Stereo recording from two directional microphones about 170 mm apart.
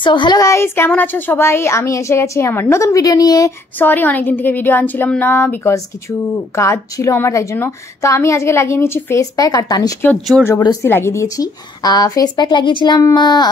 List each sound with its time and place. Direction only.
0.0 s a woman's voice: 30° left (ahead or behind)
3.7 s a woman's voice: 10° left (ahead or behind)